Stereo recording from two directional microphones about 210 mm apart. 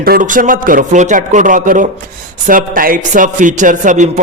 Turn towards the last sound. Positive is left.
turn(degrees=-35)  # may be behind; listen again after turning